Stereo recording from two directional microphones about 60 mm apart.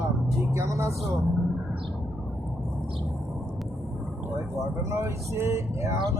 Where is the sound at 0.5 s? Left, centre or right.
Right.